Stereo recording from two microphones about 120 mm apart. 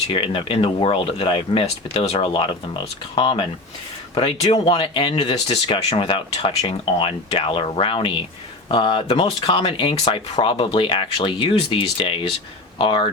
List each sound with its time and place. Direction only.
0.1 s speech: 45° left (ahead or behind)
4.6 s speech: 45° left (ahead or behind)